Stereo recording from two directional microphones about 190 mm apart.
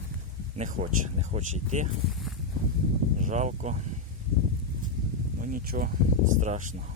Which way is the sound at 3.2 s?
40° right (ahead or behind).